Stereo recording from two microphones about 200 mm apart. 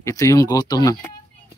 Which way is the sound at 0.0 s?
15° left (ahead or behind).